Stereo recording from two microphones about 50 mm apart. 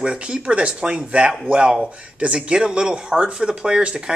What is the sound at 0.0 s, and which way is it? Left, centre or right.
Speech, centre.